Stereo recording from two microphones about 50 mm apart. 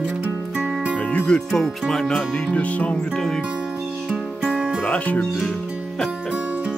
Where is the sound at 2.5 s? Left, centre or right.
Left.